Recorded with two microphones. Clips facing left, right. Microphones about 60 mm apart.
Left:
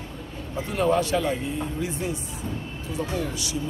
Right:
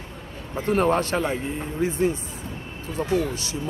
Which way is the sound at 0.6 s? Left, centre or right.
Right.